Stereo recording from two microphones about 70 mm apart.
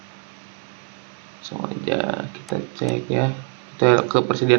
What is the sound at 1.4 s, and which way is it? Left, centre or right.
Speech, centre.